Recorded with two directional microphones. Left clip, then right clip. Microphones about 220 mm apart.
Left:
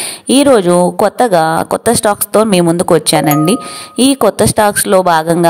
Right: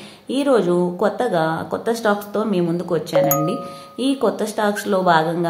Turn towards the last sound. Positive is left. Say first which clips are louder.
# left 7 dB
turn(degrees=50)  # may be behind; listen again after turning